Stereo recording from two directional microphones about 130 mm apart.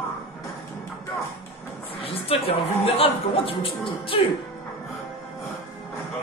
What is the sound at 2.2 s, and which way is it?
A man's voice, 45° left (ahead or behind).